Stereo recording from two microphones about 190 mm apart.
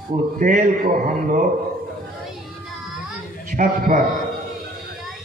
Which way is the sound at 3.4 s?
45° right (ahead or behind).